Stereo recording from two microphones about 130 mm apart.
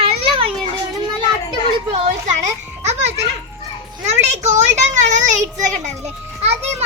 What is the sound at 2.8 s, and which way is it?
Children playing, 55° right (ahead or behind).